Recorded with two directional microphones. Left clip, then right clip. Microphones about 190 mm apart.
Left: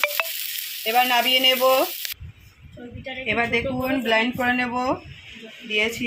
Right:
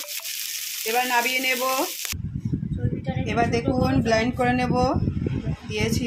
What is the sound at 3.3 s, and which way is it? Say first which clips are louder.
Speech: left 1 dB; 5° left (ahead or behind).